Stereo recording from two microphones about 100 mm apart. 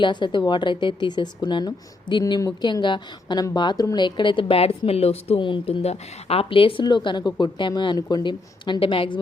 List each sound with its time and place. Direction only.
0.0 s a woman's voice: 55° left (ahead or behind); by 5.4 s 90° left
5.4 s speech: 55° left (ahead or behind)
6.8 s a woman's voice: 50° left (ahead or behind)